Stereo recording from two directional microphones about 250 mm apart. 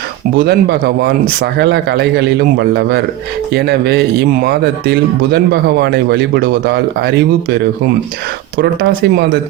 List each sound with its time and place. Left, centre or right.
0.3 s speech: right
8.5 s speech: right